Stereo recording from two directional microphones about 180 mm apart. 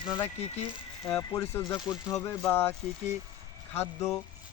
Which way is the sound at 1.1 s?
10° left (ahead or behind).